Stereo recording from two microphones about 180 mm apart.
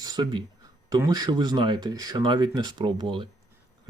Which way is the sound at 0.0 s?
20° right (ahead or behind).